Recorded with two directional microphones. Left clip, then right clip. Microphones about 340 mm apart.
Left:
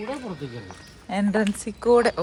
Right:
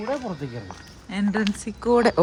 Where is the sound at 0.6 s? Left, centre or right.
Centre.